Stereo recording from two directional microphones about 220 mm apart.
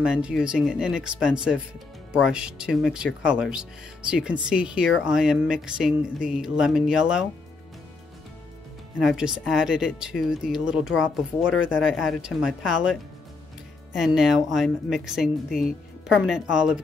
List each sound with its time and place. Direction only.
0.0 s speech: 5° right (ahead or behind)
9.0 s speech: 5° right (ahead or behind)
13.9 s speech: centre (ahead or behind)